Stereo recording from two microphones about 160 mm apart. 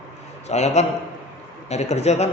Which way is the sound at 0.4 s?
45° left (ahead or behind).